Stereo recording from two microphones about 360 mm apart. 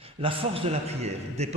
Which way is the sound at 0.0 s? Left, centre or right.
Centre.